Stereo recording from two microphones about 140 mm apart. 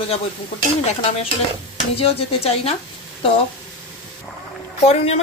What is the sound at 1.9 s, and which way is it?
Speech, 45° left (ahead or behind).